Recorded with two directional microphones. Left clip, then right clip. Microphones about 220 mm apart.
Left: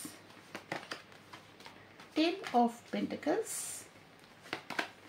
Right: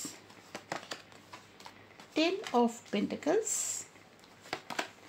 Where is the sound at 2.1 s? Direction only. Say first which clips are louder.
Right 1 dB; 40° right (ahead or behind).